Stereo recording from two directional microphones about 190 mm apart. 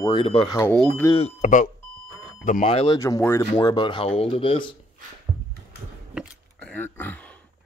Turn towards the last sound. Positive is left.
turn(degrees=10)  # may be behind; listen again after turning